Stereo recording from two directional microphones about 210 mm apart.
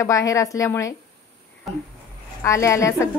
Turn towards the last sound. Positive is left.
turn(degrees=15)  # may be behind; listen again after turning